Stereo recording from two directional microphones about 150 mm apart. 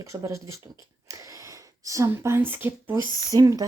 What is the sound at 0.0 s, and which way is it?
Speech, 20° right (ahead or behind).